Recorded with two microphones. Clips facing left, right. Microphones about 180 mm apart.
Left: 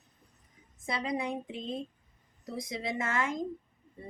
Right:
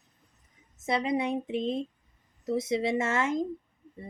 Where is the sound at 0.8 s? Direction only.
25° right (ahead or behind).